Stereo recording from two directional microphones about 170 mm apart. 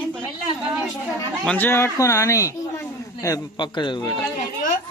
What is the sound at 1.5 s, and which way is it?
Speech, 10° left (ahead or behind).